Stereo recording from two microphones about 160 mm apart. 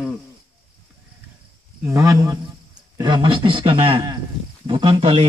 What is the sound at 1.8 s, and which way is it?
A man's voice, 20° right (ahead or behind).